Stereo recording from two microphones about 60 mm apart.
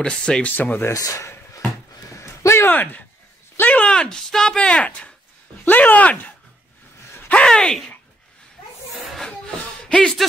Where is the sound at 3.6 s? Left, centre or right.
Left.